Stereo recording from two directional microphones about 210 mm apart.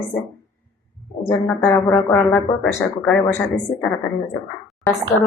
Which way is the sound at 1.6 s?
15° left (ahead or behind).